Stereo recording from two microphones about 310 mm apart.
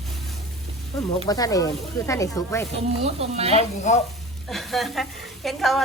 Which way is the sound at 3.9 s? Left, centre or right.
Left.